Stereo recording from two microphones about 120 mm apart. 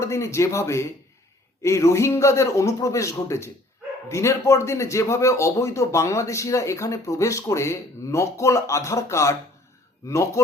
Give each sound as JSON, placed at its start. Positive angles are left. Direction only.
{"t": 0.0, "sound": "speech", "side_deg": 25}